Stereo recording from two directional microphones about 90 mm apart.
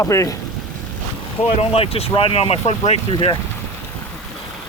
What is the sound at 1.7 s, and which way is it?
Speech, 90° left.